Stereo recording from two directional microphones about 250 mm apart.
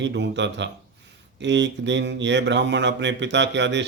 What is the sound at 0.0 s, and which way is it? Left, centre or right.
Speech, right.